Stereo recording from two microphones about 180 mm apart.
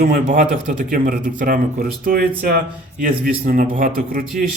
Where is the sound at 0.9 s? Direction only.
50° right (ahead or behind).